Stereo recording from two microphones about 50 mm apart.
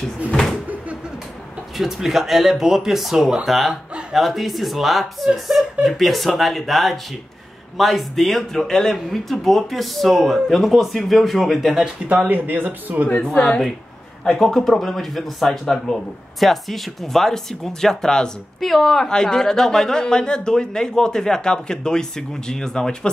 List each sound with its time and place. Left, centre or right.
0.3 s cupboard open or close: centre
1.8 s speech: centre
12.3 s speech: right
13.1 s a woman's voice: left
14.2 s speech: centre
18.6 s a man's voice: centre